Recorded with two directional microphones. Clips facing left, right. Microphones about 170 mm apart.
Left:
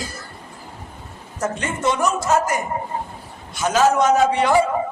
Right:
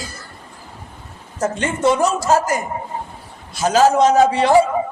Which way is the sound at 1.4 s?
30° right (ahead or behind).